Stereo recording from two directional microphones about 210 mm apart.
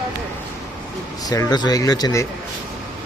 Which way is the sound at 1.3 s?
20° left (ahead or behind).